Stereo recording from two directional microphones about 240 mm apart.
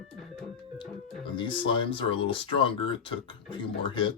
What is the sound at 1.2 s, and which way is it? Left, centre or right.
Speech, left.